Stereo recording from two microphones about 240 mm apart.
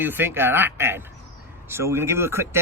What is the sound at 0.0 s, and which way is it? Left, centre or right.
Speech, centre.